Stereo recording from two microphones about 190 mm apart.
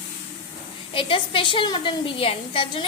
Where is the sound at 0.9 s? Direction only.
25° left (ahead or behind).